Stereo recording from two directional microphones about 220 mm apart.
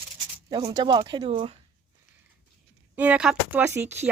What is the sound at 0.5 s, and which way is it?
Speech, 20° right (ahead or behind).